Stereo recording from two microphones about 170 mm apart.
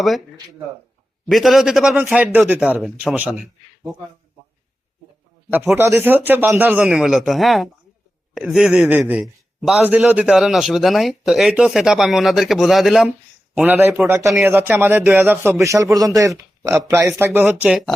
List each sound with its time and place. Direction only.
1.3 s a man's voice: centre (ahead or behind)
5.5 s a man's voice: 10° right (ahead or behind)